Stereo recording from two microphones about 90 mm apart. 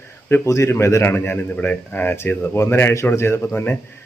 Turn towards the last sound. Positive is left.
turn(degrees=25)  # may be behind; listen again after turning